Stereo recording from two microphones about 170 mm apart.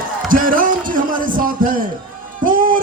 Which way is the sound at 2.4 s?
55° right (ahead or behind).